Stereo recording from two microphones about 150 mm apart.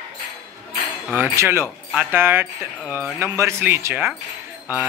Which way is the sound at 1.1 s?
15° right (ahead or behind).